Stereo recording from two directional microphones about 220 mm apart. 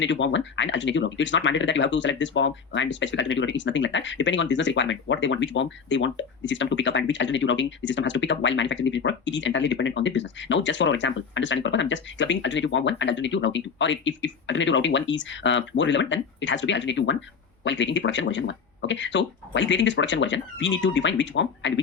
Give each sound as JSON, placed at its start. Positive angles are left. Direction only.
{"t": 0.0, "sound": "speech", "side_deg": 55}